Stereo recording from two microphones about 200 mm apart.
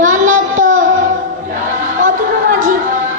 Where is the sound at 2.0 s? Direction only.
40° right (ahead or behind).